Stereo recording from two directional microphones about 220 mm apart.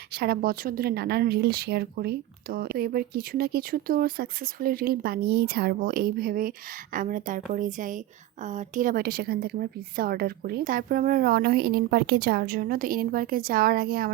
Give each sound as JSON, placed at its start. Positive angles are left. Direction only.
{"t": 0.1, "sound": "a woman's voice", "side_deg": -45}